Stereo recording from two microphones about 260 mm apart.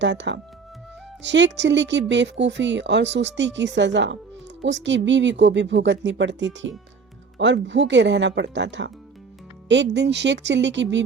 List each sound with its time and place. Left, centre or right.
0.0 s speech: right